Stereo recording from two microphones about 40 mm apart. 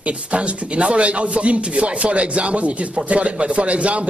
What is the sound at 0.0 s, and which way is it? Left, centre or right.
A man's voice, right.